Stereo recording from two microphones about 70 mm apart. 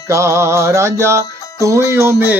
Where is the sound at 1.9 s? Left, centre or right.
Right.